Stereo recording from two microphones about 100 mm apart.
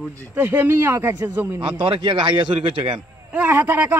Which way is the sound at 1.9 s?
50° right (ahead or behind).